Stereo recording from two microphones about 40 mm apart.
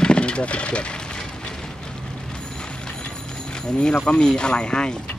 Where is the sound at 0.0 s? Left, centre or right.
Left.